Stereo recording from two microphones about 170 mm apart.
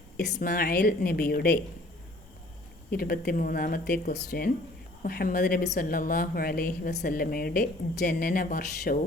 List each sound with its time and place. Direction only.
0.3 s a woman's voice: 60° left (ahead or behind)
2.9 s a woman's voice: 60° left (ahead or behind)